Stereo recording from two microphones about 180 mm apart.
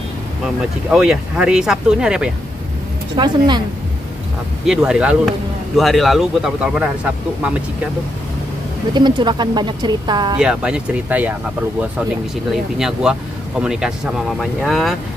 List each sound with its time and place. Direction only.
0.8 s speech: 5° right (ahead or behind)
3.2 s speech: 25° right (ahead or behind)
4.6 s speech: 5° right (ahead or behind)
8.9 s speech: 25° right (ahead or behind)
10.3 s speech: 5° right (ahead or behind)
12.4 s speech: centre (ahead or behind)